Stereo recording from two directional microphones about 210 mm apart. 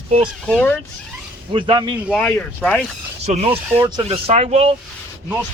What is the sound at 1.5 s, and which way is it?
Speech, 25° right (ahead or behind).